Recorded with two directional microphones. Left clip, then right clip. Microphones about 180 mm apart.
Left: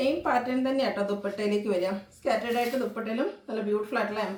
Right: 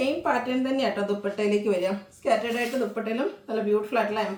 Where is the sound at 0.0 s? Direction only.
15° right (ahead or behind).